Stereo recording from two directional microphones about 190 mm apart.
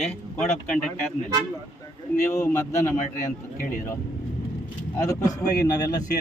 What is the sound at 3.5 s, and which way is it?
Speech, 45° left (ahead or behind).